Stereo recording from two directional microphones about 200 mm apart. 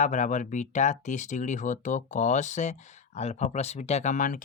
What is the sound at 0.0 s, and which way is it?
Speech, 40° left (ahead or behind).